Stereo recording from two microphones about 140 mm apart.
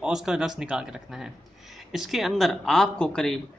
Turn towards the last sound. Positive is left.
turn(degrees=5)  # may be behind; listen again after turning